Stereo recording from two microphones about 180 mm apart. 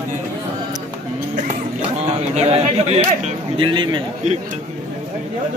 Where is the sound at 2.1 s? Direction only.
35° right (ahead or behind).